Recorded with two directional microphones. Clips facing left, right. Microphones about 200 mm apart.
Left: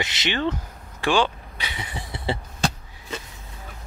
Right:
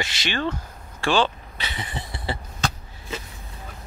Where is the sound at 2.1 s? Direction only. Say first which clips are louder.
Left 3 dB; 25° left (ahead or behind).